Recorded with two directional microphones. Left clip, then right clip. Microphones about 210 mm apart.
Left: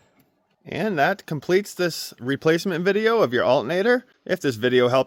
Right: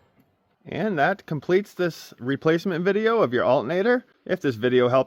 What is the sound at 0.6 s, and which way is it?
Speech, 5° left (ahead or behind).